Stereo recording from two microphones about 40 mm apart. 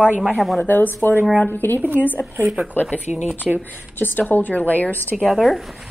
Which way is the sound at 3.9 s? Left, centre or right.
Left.